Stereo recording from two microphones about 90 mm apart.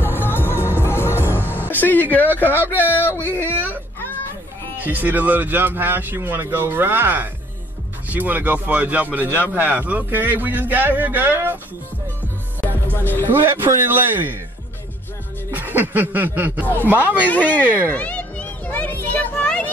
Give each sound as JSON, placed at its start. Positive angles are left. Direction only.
{"t": 0.0, "sound": "music", "side_deg": 25}
{"t": 1.2, "sound": "music", "side_deg": -20}
{"t": 2.0, "sound": "speech", "side_deg": 20}
{"t": 4.8, "sound": "speech", "side_deg": -20}
{"t": 12.9, "sound": "music", "side_deg": 20}
{"t": 13.3, "sound": "speech", "side_deg": -25}
{"t": 15.5, "sound": "a sound", "side_deg": -20}
{"t": 16.8, "sound": "speech", "side_deg": -20}
{"t": 17.3, "sound": "speech", "side_deg": 15}
{"t": 17.6, "sound": "speech", "side_deg": -20}
{"t": 17.9, "sound": "a sound", "side_deg": 15}